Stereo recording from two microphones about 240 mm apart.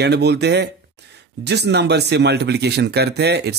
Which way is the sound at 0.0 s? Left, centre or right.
Right.